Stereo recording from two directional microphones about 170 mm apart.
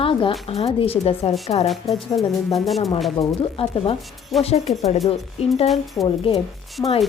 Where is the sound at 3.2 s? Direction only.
35° left (ahead or behind).